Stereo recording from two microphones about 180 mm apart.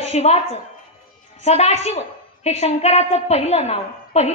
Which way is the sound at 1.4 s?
35° left (ahead or behind).